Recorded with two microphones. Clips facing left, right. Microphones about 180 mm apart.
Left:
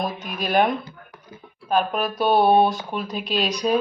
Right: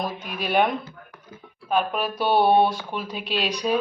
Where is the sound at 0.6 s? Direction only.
15° left (ahead or behind).